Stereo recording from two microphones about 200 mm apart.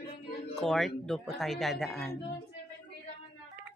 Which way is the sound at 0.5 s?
Centre (ahead or behind).